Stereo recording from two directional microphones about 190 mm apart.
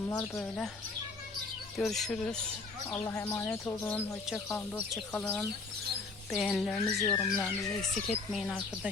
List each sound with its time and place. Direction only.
0.1 s speech: 10° left (ahead or behind)
1.7 s speech: centre (ahead or behind)
2.9 s speech: 15° left (ahead or behind)